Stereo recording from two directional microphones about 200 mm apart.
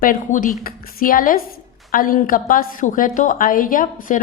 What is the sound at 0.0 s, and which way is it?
A woman's voice, 45° left (ahead or behind).